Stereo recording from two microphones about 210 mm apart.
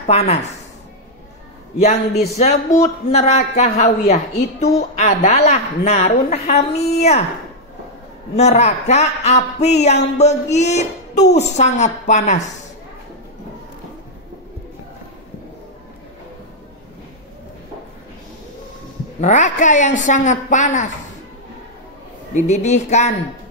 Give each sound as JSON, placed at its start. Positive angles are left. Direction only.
{"t": 0.0, "sound": "a woman's voice", "side_deg": 30}
{"t": 1.8, "sound": "a woman's voice", "side_deg": 35}
{"t": 8.4, "sound": "a woman's voice", "side_deg": 30}
{"t": 19.2, "sound": "a woman's voice", "side_deg": 35}
{"t": 22.3, "sound": "a woman's voice", "side_deg": 35}